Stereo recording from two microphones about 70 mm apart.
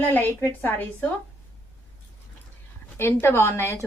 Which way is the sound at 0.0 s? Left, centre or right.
Left.